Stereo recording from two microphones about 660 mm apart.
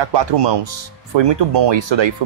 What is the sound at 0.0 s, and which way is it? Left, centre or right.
Speech, right.